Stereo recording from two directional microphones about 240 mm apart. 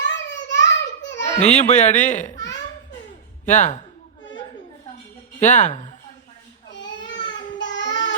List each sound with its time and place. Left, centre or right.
0.0 s a sound: left
1.4 s speech: left
3.4 s speech: left
5.4 s speech: left
7.6 s child singing: left